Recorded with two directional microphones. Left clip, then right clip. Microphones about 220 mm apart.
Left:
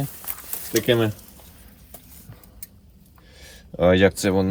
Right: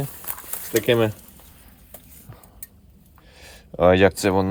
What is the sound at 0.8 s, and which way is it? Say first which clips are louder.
Speech: right 1 dB; 25° right (ahead or behind).